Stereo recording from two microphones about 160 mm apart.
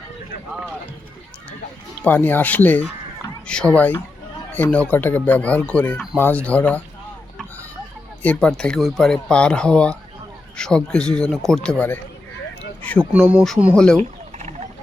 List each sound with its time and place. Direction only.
2.0 s speech: 10° left (ahead or behind)
8.2 s speech: 10° left (ahead or behind)
13.0 s speech: 10° right (ahead or behind)
13.7 s speech: 5° left (ahead or behind)
14.3 s a sound: 45° right (ahead or behind)